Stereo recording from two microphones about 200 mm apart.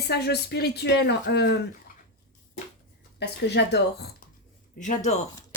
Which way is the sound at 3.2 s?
60° left (ahead or behind).